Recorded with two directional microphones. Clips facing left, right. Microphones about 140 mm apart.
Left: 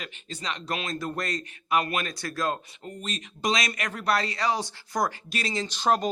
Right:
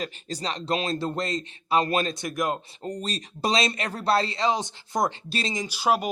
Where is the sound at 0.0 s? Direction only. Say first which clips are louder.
Right 5 dB; 35° right (ahead or behind).